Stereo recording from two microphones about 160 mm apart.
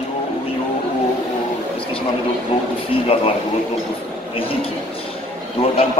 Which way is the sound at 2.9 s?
35° left (ahead or behind).